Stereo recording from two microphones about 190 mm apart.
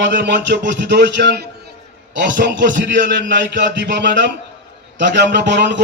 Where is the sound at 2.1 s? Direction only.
70° right (ahead or behind).